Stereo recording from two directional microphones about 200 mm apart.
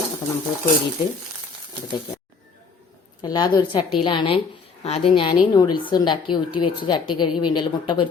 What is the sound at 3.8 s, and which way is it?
Speech, 5° right (ahead or behind).